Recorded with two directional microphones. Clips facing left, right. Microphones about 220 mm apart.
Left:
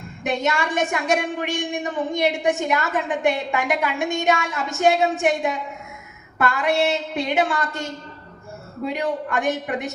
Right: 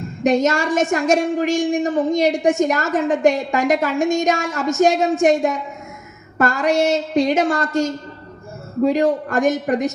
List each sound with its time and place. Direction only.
0.2 s a woman's voice: 40° right (ahead or behind)